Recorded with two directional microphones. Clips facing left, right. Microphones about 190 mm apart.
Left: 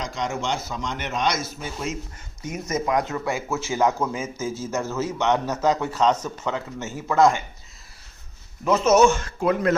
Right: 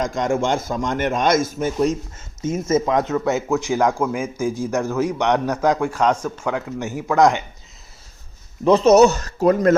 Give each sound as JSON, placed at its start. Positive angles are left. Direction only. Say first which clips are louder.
{"t": 0.0, "sound": "a man's voice", "louder": "right 7 dB", "side_deg": -50}
{"t": 2.4, "sound": "speech", "louder": "right 8 dB", "side_deg": -25}
{"t": 8.6, "sound": "speech", "louder": "right 5 dB", "side_deg": -35}